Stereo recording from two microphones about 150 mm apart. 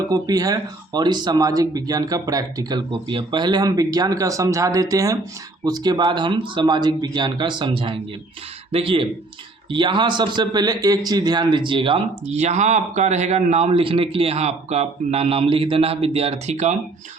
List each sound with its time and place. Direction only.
0.1 s speech: 25° right (ahead or behind); by 16.7 s 50° right (ahead or behind)